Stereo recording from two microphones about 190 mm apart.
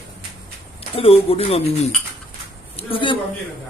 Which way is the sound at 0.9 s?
30° left (ahead or behind).